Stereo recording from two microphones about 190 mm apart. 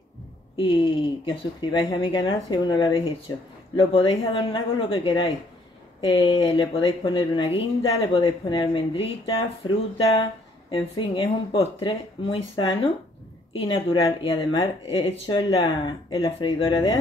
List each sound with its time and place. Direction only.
0.6 s speech: 25° left (ahead or behind)
14.2 s speech: 30° left (ahead or behind)